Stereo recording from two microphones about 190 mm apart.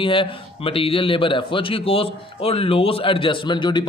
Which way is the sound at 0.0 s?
25° left (ahead or behind).